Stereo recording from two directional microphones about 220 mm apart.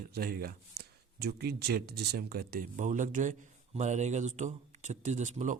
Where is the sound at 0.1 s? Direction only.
45° right (ahead or behind).